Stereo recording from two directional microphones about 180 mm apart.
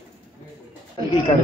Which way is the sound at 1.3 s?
30° left (ahead or behind).